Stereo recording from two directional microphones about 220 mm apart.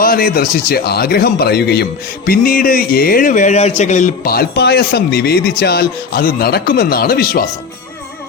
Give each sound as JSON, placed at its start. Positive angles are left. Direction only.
{"t": 0.0, "sound": "a man's voice", "side_deg": 40}